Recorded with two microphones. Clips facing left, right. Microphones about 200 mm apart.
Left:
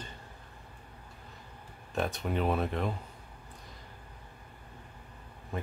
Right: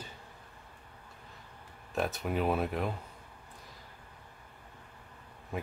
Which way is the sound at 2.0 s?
5° right (ahead or behind).